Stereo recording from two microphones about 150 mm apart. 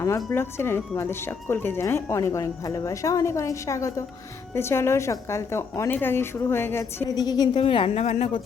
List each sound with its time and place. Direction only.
0.3 s a woman's voice: 15° left (ahead or behind)
7.2 s a woman's voice: 25° left (ahead or behind); by 8.3 s 45° left (ahead or behind)